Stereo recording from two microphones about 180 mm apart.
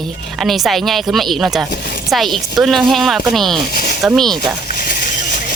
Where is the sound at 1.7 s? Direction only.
55° left (ahead or behind).